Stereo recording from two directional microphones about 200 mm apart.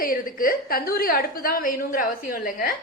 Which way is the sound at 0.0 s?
45° left (ahead or behind).